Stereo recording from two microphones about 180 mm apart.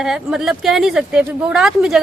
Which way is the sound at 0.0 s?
5° right (ahead or behind).